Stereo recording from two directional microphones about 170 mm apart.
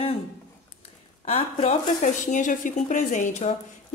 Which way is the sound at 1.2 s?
40° left (ahead or behind).